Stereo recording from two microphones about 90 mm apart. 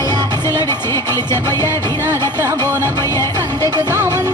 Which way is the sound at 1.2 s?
50° right (ahead or behind).